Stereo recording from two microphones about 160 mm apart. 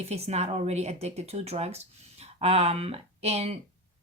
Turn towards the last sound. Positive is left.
turn(degrees=-40)  # may be behind; listen again after turning